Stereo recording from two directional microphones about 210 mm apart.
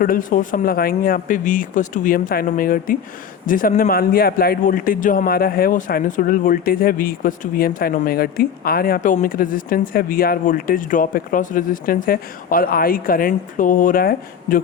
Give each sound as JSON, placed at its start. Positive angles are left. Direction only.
{"t": 0.0, "sound": "a man's voice", "side_deg": 40}